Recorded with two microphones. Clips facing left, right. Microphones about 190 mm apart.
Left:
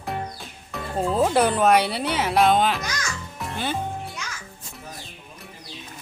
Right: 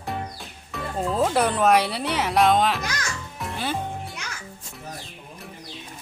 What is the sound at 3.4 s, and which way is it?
Music, centre (ahead or behind).